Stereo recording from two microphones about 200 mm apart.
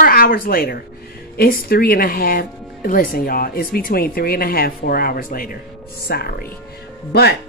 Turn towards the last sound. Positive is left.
turn(degrees=55)  # may be behind; listen again after turning